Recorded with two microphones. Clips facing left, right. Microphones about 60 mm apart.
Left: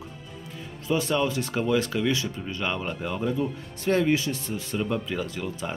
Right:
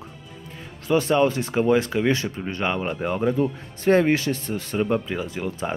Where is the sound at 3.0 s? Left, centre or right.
Right.